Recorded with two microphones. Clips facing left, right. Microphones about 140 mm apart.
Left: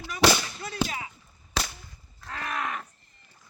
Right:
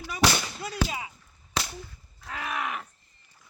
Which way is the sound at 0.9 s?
15° right (ahead or behind).